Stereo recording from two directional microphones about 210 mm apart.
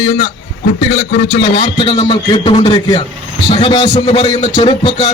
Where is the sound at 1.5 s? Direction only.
20° left (ahead or behind).